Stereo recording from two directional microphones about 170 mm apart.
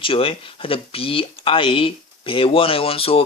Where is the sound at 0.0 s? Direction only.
35° left (ahead or behind).